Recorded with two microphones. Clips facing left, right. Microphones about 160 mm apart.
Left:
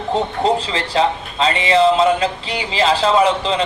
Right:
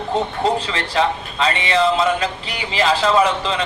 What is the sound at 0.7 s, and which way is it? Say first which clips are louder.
A man's voice: left 2 dB; 25° left (ahead or behind).